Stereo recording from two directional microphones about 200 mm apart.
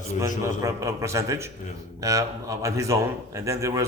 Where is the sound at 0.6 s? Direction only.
15° right (ahead or behind).